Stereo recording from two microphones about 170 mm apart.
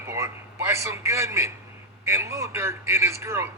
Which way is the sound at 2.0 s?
15° right (ahead or behind).